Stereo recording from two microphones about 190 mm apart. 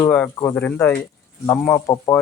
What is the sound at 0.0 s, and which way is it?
Speech, 10° left (ahead or behind).